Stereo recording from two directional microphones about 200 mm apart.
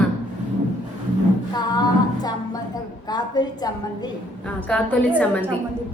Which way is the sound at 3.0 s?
20° left (ahead or behind).